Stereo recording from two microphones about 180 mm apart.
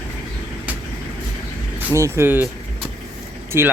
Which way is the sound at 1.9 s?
15° right (ahead or behind).